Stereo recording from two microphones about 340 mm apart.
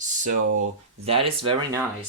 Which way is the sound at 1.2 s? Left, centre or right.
Centre.